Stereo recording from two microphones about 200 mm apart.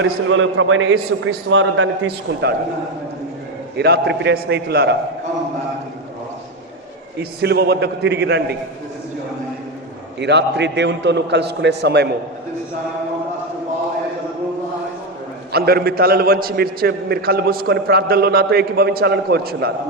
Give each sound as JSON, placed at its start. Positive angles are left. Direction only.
{"t": 0.0, "sound": "a man's voice", "side_deg": -75}
{"t": 3.8, "sound": "a man's voice", "side_deg": -55}
{"t": 7.2, "sound": "a man's voice", "side_deg": -55}
{"t": 10.2, "sound": "a man's voice", "side_deg": -60}
{"t": 15.5, "sound": "a man's voice", "side_deg": -50}